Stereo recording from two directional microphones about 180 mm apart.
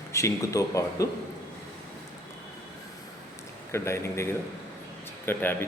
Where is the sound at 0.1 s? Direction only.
15° left (ahead or behind).